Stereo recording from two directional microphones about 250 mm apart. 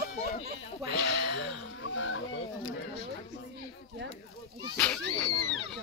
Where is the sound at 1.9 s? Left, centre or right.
Left.